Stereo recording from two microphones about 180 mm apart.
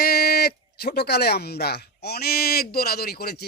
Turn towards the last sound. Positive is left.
turn(degrees=60)  # may be behind; listen again after turning